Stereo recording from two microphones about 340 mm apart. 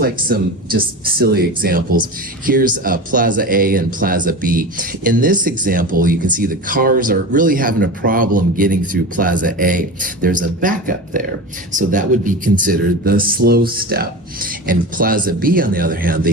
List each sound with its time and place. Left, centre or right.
0.0 s speech: right